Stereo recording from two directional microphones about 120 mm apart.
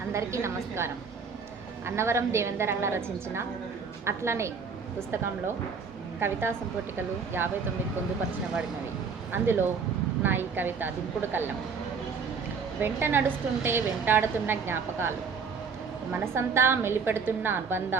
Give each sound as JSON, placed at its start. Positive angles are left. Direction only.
{"t": 0.1, "sound": "a woman's voice", "side_deg": -25}
{"t": 2.0, "sound": "a woman's voice", "side_deg": -20}
{"t": 6.1, "sound": "a woman's voice", "side_deg": -20}
{"t": 9.3, "sound": "a woman's voice", "side_deg": -20}
{"t": 12.8, "sound": "a woman's voice", "side_deg": -20}
{"t": 16.2, "sound": "a woman's voice", "side_deg": -20}